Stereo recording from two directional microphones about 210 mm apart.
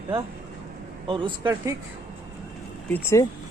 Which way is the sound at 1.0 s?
25° right (ahead or behind).